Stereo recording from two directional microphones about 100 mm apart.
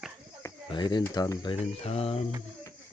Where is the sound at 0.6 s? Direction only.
50° left (ahead or behind).